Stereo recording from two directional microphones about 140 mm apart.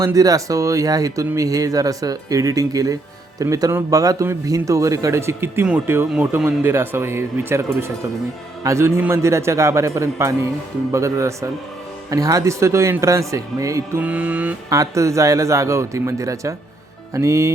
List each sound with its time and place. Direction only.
0.0 s speech: 25° right (ahead or behind)
14.0 s speech: 10° right (ahead or behind)
14.7 s speech: 20° right (ahead or behind)